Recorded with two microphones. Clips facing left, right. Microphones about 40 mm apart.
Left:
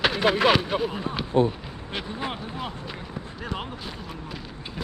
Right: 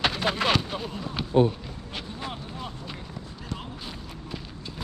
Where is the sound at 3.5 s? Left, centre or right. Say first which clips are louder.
Left 4 dB; centre.